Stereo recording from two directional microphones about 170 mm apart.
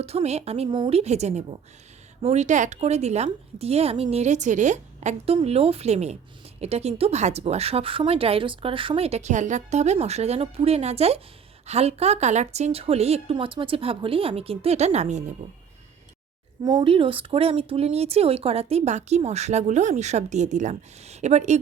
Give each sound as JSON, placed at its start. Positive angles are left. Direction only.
{"t": 0.0, "sound": "speech", "side_deg": -40}
{"t": 16.6, "sound": "speech", "side_deg": -25}